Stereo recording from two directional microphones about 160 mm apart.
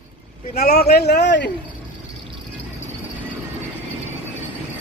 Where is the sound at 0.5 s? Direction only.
75° left (ahead or behind).